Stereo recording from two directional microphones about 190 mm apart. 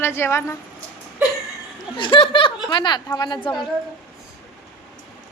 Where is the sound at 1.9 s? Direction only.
25° left (ahead or behind).